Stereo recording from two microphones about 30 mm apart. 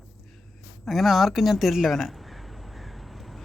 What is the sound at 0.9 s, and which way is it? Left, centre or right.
Speech, centre.